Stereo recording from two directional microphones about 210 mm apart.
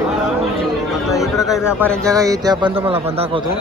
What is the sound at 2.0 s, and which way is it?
A man's voice, 15° right (ahead or behind).